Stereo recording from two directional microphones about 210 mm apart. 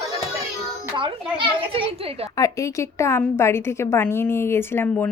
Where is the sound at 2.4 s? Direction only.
15° left (ahead or behind).